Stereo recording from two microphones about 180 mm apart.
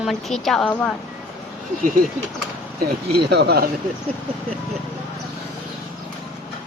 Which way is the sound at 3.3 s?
65° right (ahead or behind).